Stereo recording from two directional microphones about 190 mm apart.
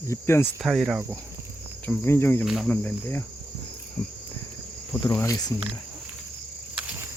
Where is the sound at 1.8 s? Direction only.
10° left (ahead or behind).